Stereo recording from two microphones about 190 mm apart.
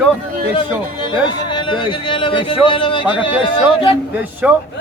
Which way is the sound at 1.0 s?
25° left (ahead or behind).